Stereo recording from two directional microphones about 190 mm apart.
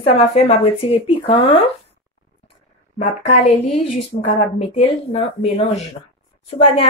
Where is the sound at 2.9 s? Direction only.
35° left (ahead or behind).